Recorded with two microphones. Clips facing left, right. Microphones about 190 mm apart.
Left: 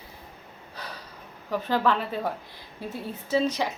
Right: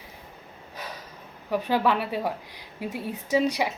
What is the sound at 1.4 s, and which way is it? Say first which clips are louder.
A woman's voice: right 1 dB; 10° right (ahead or behind).